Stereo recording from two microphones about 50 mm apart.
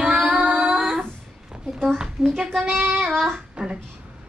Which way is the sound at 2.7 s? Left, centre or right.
Right.